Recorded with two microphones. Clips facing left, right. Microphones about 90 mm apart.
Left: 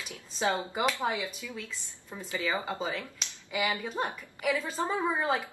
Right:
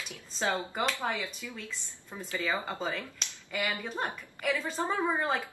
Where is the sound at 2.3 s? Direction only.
15° left (ahead or behind).